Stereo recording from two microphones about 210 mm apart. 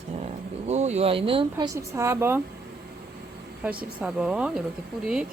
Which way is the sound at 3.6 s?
10° right (ahead or behind).